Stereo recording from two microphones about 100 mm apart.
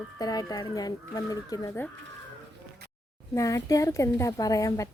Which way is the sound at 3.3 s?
30° left (ahead or behind).